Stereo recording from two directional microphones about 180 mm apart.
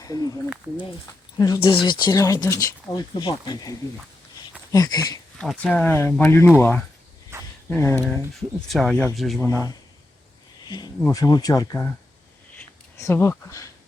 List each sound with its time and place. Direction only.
0.0 s speech: 20° left (ahead or behind)
1.4 s speech: 15° left (ahead or behind)
5.4 s speech: 5° left (ahead or behind)
7.3 s a sound: 15° right (ahead or behind)
7.7 s speech: 15° left (ahead or behind)
8.3 s speech: centre (ahead or behind)
9.4 s speech: 20° left (ahead or behind)
12.5 s a sound: 15° left (ahead or behind)